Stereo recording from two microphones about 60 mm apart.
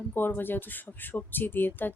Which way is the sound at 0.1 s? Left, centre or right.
Left.